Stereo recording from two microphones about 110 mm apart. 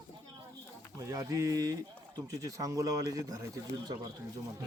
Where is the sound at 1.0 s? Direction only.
30° right (ahead or behind).